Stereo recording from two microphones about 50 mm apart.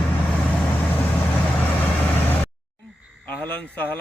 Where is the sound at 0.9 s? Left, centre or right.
Left.